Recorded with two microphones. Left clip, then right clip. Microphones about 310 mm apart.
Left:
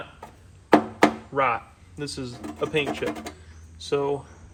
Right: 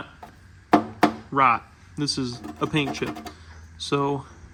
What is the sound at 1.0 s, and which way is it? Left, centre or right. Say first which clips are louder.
Music: right 1 dB; right.